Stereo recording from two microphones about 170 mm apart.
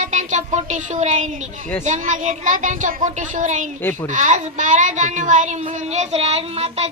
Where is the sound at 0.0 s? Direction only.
45° right (ahead or behind).